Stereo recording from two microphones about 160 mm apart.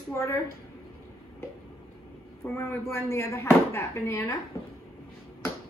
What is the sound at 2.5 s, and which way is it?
Speech, 15° left (ahead or behind).